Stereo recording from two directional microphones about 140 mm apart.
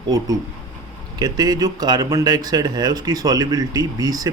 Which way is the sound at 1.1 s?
25° right (ahead or behind).